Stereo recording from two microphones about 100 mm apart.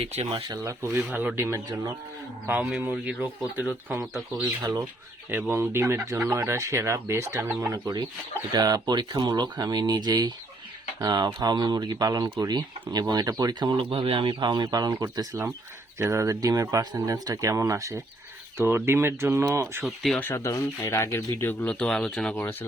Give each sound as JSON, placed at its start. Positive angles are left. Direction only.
{"t": 0.0, "sound": "speech", "side_deg": -85}
{"t": 0.4, "sound": "speech", "side_deg": -35}
{"t": 2.9, "sound": "speech", "side_deg": -10}
{"t": 5.3, "sound": "speech", "side_deg": -20}
{"t": 19.8, "sound": "speech", "side_deg": 0}
{"t": 20.1, "sound": "speech", "side_deg": 25}
{"t": 21.6, "sound": "speech", "side_deg": 10}